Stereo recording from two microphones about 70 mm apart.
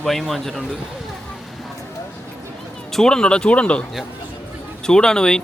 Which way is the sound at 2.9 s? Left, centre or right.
Centre.